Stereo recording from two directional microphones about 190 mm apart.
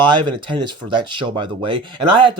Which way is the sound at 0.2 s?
25° right (ahead or behind).